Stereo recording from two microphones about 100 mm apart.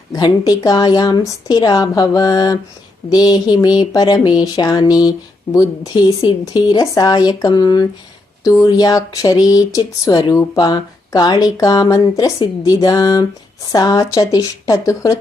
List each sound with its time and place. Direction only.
0.1 s speech: 40° left (ahead or behind)